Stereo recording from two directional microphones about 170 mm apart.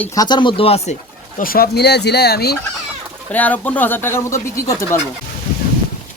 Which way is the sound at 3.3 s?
10° left (ahead or behind).